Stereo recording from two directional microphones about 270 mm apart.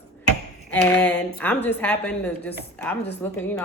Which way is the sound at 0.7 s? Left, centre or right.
Centre.